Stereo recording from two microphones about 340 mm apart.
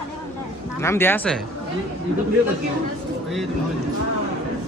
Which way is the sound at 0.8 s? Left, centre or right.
Centre.